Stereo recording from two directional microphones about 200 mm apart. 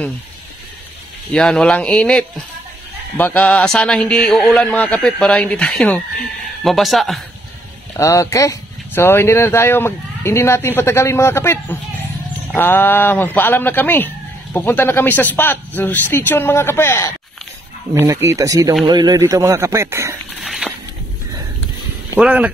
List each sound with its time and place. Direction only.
1.3 s a man's voice: 5° left (ahead or behind)
7.9 s speech: 15° left (ahead or behind)
17.9 s speech: 15° right (ahead or behind)
20.4 s a sound: centre (ahead or behind)
22.1 s speech: 5° right (ahead or behind)